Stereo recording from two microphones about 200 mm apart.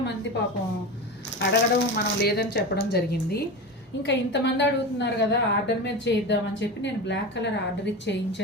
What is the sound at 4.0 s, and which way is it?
A woman's voice, 60° left (ahead or behind).